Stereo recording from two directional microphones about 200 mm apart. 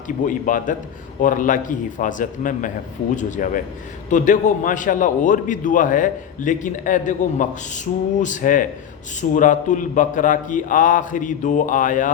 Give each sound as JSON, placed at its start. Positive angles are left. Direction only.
{"t": 0.3, "sound": "a man's voice", "side_deg": 40}